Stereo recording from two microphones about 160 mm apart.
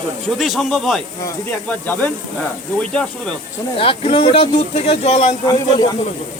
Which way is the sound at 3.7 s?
35° left (ahead or behind).